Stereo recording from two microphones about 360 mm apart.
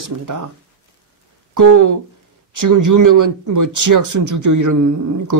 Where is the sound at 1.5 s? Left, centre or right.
Right.